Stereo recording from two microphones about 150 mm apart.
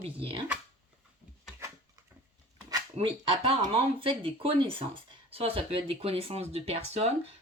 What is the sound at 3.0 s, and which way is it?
Speech, 45° right (ahead or behind).